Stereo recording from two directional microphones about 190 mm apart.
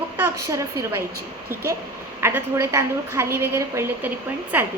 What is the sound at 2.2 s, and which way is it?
A woman's voice, 15° right (ahead or behind).